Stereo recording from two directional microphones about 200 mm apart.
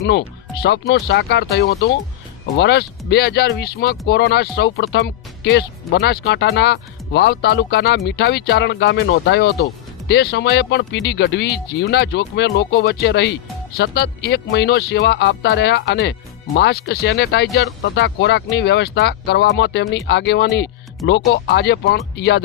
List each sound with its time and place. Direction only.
0.0 s speech: 55° left (ahead or behind)